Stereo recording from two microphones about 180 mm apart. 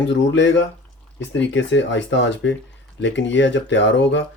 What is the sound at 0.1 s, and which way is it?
Speech, 90° left.